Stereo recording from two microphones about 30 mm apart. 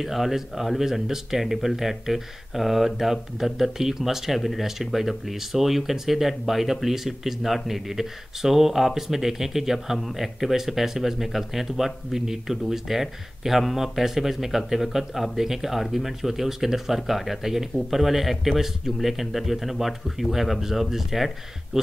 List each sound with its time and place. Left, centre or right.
0.0 s speech: centre